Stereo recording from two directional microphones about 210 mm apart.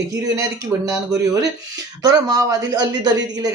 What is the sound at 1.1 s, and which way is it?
A woman's voice, 15° right (ahead or behind).